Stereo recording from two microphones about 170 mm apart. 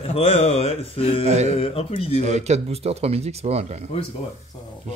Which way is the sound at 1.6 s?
35° left (ahead or behind).